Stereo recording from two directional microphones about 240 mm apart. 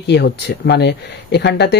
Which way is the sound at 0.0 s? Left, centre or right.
Left.